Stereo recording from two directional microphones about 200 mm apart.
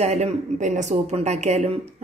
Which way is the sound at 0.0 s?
35° right (ahead or behind).